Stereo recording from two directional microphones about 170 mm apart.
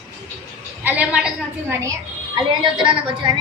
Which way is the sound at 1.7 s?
20° right (ahead or behind).